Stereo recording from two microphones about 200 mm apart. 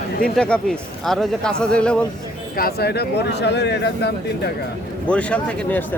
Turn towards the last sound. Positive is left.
turn(degrees=5)  # may be behind; listen again after turning